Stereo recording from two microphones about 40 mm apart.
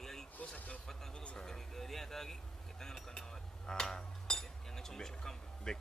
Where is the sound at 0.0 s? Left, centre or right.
Centre.